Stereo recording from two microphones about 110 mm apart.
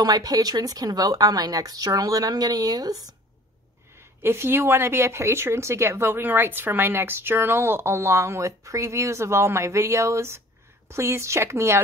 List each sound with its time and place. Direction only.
0.0 s speech: 35° right (ahead or behind)
4.2 s speech: 20° right (ahead or behind)